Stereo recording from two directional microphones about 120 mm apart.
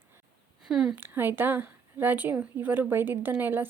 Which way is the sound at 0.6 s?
5° right (ahead or behind).